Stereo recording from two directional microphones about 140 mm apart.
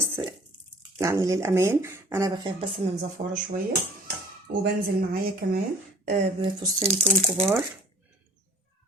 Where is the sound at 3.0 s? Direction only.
65° right (ahead or behind).